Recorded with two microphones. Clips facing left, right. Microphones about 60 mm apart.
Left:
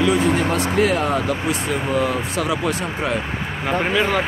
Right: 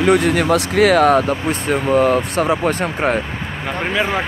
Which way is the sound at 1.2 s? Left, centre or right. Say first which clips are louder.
Right 3 dB; right.